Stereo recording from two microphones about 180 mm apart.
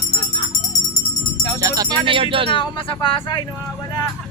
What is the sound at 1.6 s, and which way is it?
Music, 20° right (ahead or behind).